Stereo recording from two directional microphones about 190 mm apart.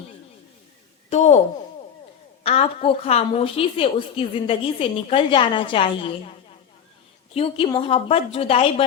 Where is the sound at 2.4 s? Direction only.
30° left (ahead or behind).